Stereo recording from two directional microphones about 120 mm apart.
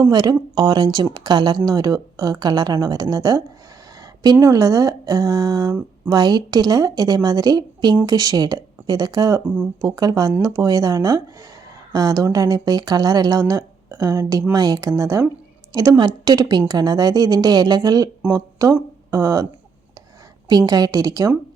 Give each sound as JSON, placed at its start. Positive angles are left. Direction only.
{"t": 0.0, "sound": "speech", "side_deg": -35}
{"t": 9.4, "sound": "speech", "side_deg": -15}
{"t": 9.8, "sound": "a woman's voice", "side_deg": -30}